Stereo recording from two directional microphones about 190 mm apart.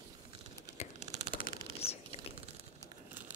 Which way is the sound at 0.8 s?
35° left (ahead or behind).